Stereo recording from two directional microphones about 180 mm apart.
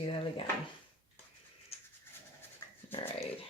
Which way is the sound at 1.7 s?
35° left (ahead or behind).